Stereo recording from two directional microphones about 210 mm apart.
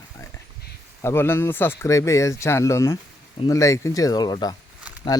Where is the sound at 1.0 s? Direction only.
10° left (ahead or behind).